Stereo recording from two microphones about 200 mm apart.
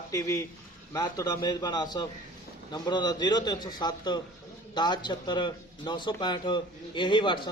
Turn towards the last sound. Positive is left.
turn(degrees=25)  # may be behind; listen again after turning